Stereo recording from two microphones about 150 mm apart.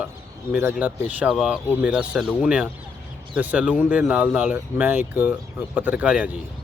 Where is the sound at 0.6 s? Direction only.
10° right (ahead or behind).